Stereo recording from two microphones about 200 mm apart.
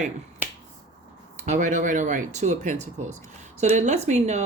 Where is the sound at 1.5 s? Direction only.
40° right (ahead or behind).